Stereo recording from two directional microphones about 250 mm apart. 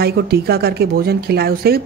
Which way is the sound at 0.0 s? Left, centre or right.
Right.